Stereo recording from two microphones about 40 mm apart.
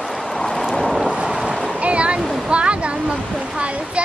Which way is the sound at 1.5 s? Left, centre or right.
Centre.